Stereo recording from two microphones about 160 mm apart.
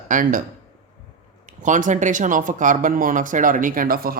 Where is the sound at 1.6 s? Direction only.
50° right (ahead or behind); by 4.2 s 65° right (ahead or behind).